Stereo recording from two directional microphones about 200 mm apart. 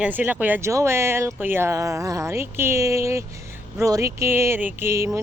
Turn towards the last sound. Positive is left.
turn(degrees=-15)  # may be behind; listen again after turning